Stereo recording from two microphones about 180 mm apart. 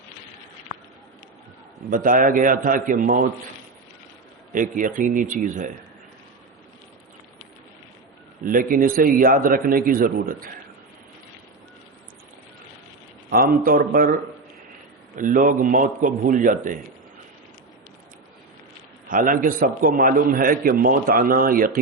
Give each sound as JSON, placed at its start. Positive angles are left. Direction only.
{"t": 1.9, "sound": "a man's voice", "side_deg": -50}
{"t": 4.5, "sound": "a man's voice", "side_deg": -45}
{"t": 8.4, "sound": "a man's voice", "side_deg": -50}
{"t": 13.3, "sound": "a man's voice", "side_deg": -50}
{"t": 19.0, "sound": "a man's voice", "side_deg": -50}